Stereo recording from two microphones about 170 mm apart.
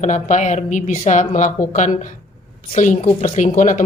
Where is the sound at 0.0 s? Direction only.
45° left (ahead or behind).